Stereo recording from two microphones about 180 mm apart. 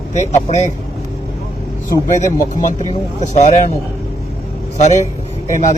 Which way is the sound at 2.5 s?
45° left (ahead or behind).